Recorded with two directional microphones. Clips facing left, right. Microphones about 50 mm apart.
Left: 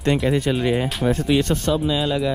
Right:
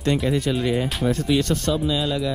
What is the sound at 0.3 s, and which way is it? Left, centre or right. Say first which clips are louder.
Speech: left 2 dB; left.